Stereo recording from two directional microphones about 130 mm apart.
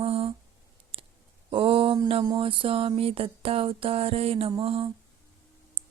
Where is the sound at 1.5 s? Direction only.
45° right (ahead or behind).